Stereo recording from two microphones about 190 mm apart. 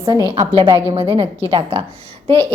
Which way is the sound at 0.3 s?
25° right (ahead or behind).